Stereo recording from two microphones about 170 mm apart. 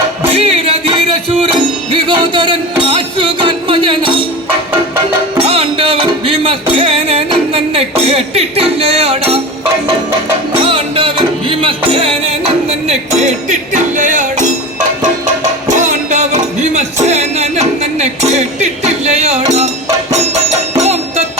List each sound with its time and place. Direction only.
0.3 s music: 35° right (ahead or behind)
5.4 s music: 35° right (ahead or behind)
10.7 s music: 30° right (ahead or behind)
20.8 s music: 40° right (ahead or behind)